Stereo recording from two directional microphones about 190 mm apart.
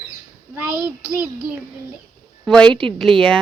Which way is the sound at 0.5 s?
10° right (ahead or behind).